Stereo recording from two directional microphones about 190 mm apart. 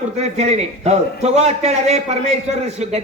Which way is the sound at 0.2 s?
35° right (ahead or behind).